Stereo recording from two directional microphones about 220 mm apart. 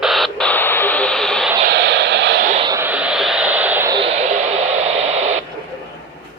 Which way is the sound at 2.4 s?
25° right (ahead or behind).